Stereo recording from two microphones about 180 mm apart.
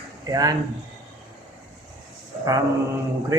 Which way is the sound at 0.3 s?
20° right (ahead or behind).